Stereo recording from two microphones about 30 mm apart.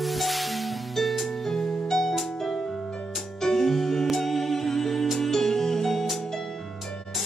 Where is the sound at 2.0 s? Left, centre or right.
Centre.